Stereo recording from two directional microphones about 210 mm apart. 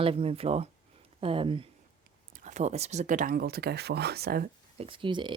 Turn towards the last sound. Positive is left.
turn(degrees=-25)  # may be behind; listen again after turning